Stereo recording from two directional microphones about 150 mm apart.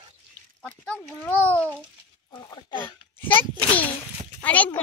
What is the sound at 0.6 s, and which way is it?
A child's voice, 10° left (ahead or behind).